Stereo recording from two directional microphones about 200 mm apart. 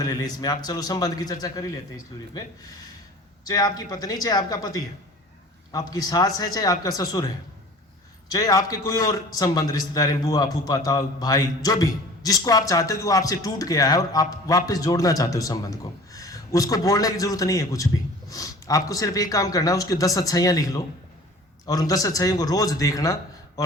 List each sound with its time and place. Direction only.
0.0 s a man's voice: 20° left (ahead or behind)
18.3 s a sound: 15° left (ahead or behind)
18.9 s a man's voice: 15° left (ahead or behind)